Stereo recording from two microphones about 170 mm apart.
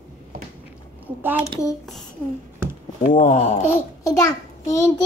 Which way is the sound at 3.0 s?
50° left (ahead or behind).